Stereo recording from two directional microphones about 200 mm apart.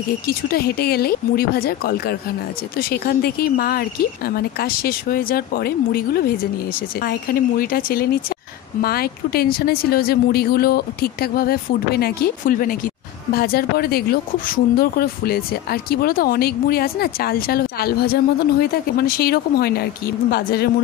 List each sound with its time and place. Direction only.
0.3 s speech: 50° left (ahead or behind)